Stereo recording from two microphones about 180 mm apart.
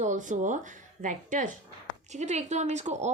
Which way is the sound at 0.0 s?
45° right (ahead or behind).